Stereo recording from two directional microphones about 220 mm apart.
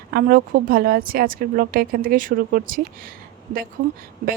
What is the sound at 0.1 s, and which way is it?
A woman's voice, 40° right (ahead or behind).